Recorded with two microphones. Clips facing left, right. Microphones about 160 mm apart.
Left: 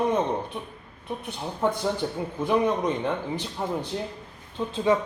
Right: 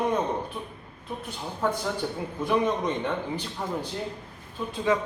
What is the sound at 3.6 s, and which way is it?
A man's voice, 20° left (ahead or behind).